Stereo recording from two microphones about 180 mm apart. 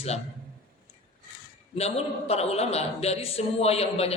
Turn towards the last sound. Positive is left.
turn(degrees=35)  # may be behind; listen again after turning